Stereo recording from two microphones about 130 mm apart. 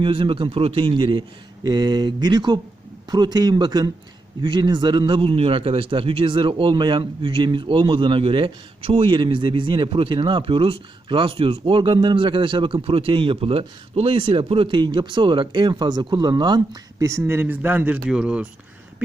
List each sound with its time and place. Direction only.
0.0 s a man's voice: 40° right (ahead or behind)
17.2 s speech: 15° right (ahead or behind)